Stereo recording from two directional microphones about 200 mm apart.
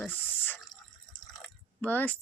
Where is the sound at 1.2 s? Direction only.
Centre (ahead or behind).